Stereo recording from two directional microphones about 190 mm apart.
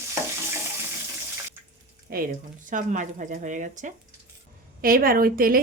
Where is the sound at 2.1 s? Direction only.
50° right (ahead or behind).